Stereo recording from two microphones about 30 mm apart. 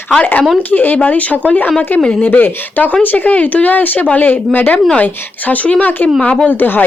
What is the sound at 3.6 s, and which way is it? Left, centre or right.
Speech, left.